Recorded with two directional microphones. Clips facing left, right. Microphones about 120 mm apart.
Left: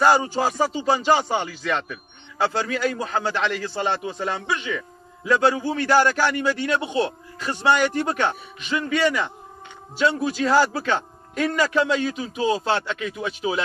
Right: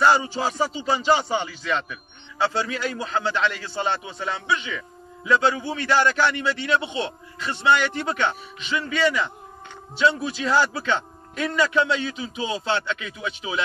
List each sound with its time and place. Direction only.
0.0 s a man's voice: 45° left (ahead or behind)